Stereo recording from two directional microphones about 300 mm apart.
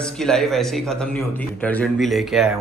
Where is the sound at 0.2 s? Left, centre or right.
Centre.